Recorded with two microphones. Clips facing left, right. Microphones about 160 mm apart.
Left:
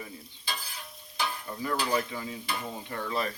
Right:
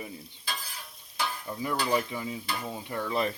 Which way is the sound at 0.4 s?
Centre (ahead or behind).